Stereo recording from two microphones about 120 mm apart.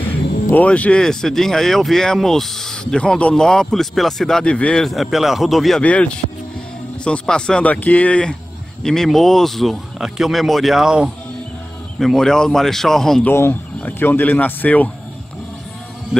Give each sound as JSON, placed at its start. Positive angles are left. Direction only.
{"t": 0.5, "sound": "speech", "side_deg": 10}
{"t": 5.8, "sound": "speech", "side_deg": 10}
{"t": 13.3, "sound": "speech", "side_deg": 20}